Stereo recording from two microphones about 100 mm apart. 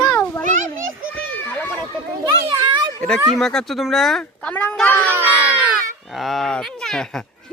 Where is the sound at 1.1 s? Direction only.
15° left (ahead or behind).